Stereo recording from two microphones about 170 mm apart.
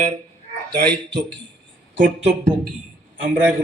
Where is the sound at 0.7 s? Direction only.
75° right (ahead or behind).